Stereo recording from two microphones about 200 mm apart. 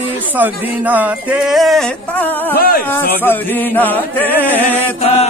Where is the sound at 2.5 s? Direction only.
45° left (ahead or behind).